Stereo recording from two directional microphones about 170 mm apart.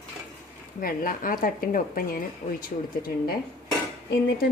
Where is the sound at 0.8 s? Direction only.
55° left (ahead or behind).